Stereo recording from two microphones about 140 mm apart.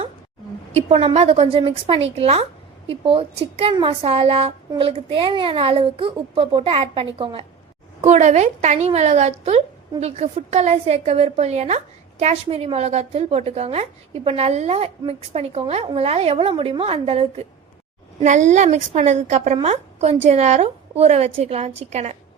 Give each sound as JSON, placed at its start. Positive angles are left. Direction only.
{"t": 0.7, "sound": "a woman's voice", "side_deg": -55}
{"t": 8.0, "sound": "a woman's voice", "side_deg": -55}
{"t": 18.2, "sound": "a woman's voice", "side_deg": -55}